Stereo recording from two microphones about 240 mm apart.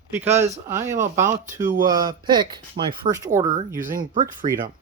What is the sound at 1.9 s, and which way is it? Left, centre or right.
Speech, centre.